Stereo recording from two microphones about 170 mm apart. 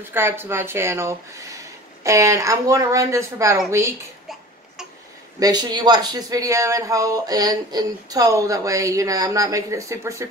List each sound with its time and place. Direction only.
0.1 s speech: 15° right (ahead or behind)
5.4 s speech: 25° right (ahead or behind)